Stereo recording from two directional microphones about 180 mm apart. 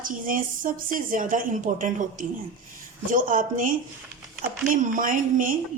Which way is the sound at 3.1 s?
45° right (ahead or behind).